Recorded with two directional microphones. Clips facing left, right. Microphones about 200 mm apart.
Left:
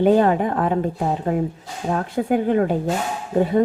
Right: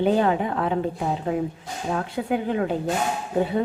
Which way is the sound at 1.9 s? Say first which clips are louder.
Left 5 dB; 45° left (ahead or behind).